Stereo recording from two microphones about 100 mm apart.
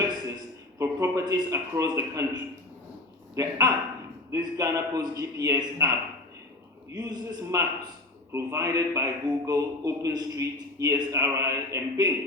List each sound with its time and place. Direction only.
0.8 s a man's voice: 35° right (ahead or behind)
6.9 s a man's voice: 40° right (ahead or behind)